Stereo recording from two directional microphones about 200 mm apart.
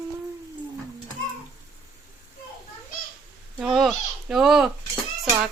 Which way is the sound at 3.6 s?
Centre (ahead or behind).